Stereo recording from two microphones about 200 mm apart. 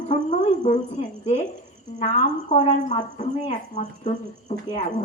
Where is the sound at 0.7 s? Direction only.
35° left (ahead or behind).